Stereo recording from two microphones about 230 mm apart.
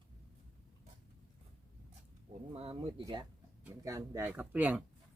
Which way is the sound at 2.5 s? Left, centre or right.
Right.